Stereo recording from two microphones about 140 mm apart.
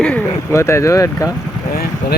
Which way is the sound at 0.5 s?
20° left (ahead or behind).